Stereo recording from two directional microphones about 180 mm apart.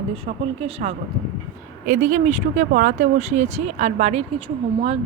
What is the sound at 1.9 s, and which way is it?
A woman's voice, 45° right (ahead or behind).